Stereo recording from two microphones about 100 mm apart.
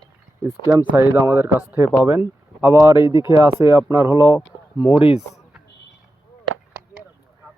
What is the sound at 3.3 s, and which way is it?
Speech, 25° right (ahead or behind).